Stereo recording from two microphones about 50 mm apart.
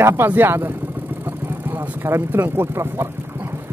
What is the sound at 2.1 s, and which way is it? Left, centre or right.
Speech, right.